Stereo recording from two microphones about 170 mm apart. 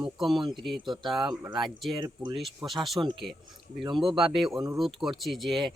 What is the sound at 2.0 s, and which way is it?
Speech, 25° right (ahead or behind).